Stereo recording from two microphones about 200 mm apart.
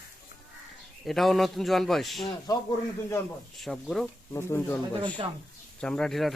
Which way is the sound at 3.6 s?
Centre (ahead or behind).